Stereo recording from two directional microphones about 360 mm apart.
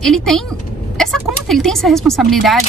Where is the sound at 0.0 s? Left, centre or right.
Centre.